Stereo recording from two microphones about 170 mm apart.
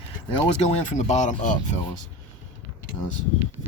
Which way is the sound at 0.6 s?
45° left (ahead or behind).